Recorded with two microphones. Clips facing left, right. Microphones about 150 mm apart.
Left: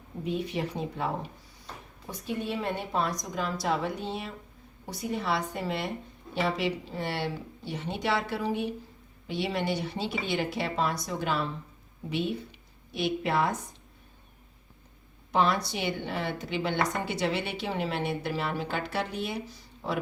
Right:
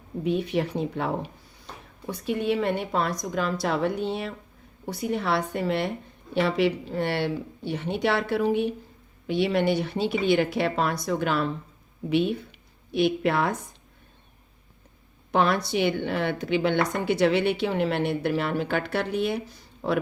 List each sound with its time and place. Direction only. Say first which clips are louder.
0.3 s a woman's voice: right 6 dB; 70° right (ahead or behind)
15.3 s a woman's voice: right 3 dB; 60° right (ahead or behind)